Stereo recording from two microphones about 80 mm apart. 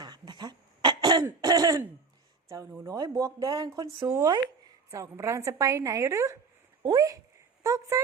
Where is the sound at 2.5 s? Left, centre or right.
Right.